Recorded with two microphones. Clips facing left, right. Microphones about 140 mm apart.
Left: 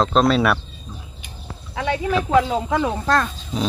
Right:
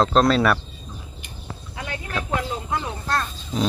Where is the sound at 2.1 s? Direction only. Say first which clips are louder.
Left 8 dB; 90° left.